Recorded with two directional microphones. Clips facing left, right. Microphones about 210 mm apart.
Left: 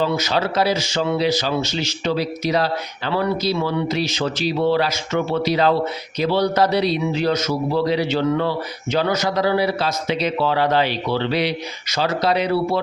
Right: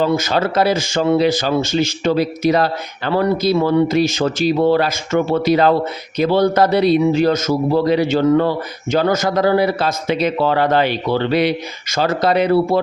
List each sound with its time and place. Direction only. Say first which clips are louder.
0.0 s a man's voice: right 4 dB; 50° right (ahead or behind)